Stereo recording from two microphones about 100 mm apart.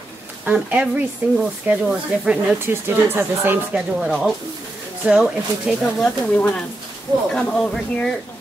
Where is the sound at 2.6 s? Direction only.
25° right (ahead or behind).